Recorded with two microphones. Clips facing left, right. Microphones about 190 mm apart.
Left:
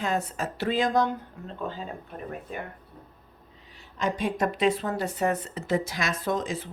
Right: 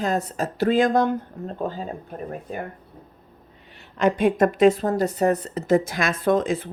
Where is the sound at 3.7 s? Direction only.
60° right (ahead or behind).